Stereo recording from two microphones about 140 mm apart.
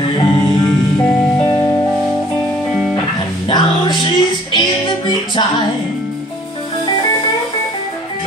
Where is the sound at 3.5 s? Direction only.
35° left (ahead or behind).